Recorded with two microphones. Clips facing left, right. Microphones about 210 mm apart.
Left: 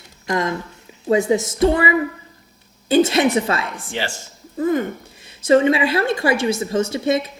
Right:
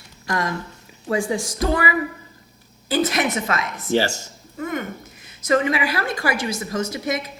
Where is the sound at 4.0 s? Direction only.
40° right (ahead or behind).